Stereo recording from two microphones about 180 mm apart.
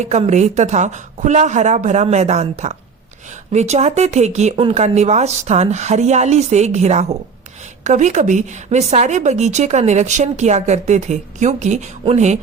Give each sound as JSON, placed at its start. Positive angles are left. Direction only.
{"t": 0.0, "sound": "a woman's voice", "side_deg": -40}